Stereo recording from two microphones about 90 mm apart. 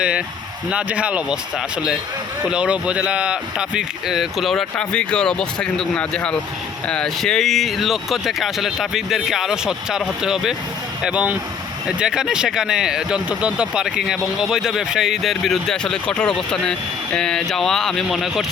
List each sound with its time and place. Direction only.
0.7 s speech: 15° right (ahead or behind)
4.8 s speech: 10° left (ahead or behind)